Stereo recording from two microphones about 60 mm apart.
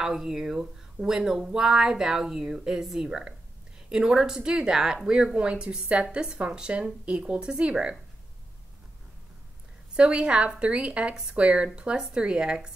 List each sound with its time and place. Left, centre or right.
0.0 s speech: centre
9.9 s speech: centre